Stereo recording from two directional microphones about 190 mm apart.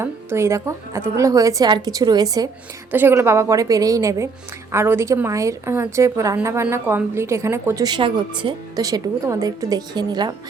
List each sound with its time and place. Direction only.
0.0 s a woman's voice: 15° right (ahead or behind)